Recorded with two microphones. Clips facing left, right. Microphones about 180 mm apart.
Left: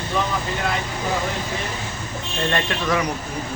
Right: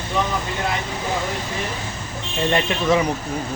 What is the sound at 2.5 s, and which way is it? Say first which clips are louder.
Speech: right 4 dB; 20° right (ahead or behind).